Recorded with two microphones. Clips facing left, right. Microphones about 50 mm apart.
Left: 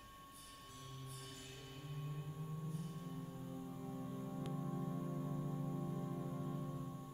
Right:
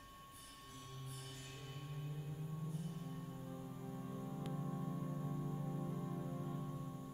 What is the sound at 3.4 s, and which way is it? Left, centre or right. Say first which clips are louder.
Music: left 1 dB; centre.